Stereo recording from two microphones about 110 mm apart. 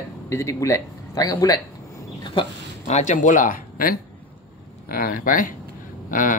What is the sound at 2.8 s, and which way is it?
Speech, 90° left.